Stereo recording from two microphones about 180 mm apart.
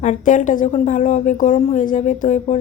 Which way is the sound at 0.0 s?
45° left (ahead or behind).